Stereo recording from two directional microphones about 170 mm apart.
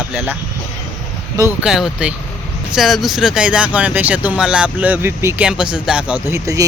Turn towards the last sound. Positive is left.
turn(degrees=-10)  # may be behind; listen again after turning